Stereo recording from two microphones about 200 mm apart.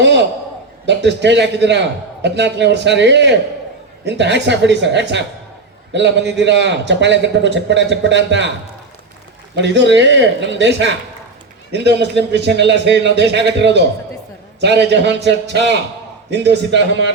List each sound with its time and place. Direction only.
0.0 s a man's voice: 60° right (ahead or behind)
9.6 s a man's voice: 60° right (ahead or behind)